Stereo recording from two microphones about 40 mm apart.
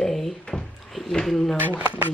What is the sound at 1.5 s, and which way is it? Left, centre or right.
Speech, right.